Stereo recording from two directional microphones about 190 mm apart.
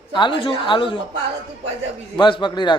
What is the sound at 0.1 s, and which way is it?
Speech, 25° left (ahead or behind).